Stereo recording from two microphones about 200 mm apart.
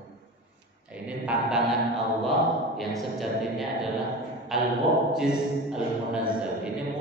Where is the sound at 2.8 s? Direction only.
Centre (ahead or behind).